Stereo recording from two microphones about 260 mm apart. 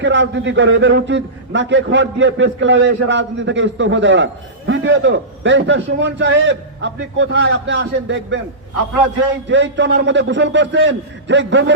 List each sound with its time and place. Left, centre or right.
0.0 s a man's voice: right
9.5 s a man's voice: right